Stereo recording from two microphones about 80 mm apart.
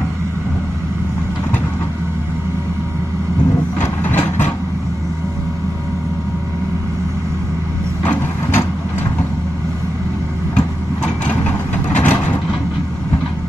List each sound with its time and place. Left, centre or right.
3.8 s vehicle: left
8.0 s vehicle: centre
11.2 s vehicle: centre